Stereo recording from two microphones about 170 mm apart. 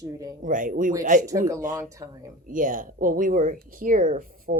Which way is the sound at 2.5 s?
50° right (ahead or behind).